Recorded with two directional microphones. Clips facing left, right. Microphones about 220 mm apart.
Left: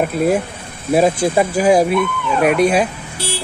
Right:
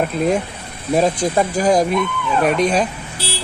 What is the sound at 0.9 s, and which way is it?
Speech, 10° left (ahead or behind).